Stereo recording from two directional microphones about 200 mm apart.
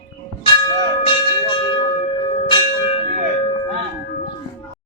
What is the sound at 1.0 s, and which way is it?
Church bell, 25° left (ahead or behind).